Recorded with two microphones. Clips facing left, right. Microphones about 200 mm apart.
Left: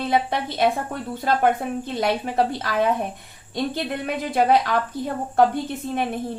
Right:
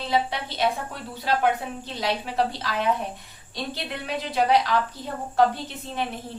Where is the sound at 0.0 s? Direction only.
55° left (ahead or behind).